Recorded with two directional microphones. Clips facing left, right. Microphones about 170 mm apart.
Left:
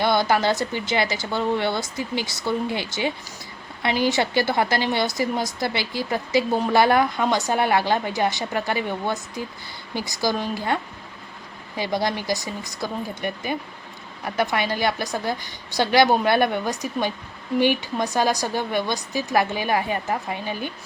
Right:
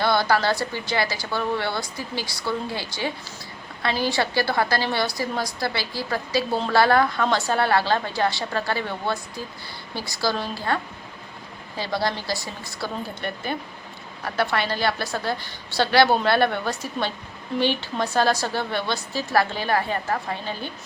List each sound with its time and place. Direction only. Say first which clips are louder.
0.0 s a woman's voice: left 1 dB; 20° left (ahead or behind)
11.8 s a woman's voice: left 2 dB; 20° left (ahead or behind)